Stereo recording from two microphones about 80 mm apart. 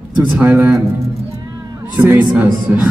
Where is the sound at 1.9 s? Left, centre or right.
Right.